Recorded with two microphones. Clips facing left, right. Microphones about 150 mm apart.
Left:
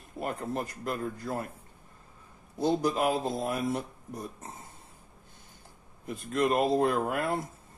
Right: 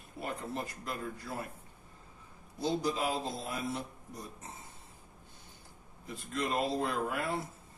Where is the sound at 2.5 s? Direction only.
55° left (ahead or behind).